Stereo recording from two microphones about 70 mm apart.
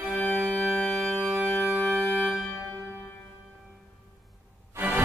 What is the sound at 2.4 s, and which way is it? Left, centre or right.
Music, left.